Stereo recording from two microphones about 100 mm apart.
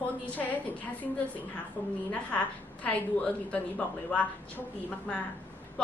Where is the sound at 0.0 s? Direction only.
15° left (ahead or behind).